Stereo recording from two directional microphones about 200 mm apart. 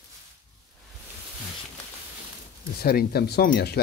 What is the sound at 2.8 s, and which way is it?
Speech, 50° left (ahead or behind).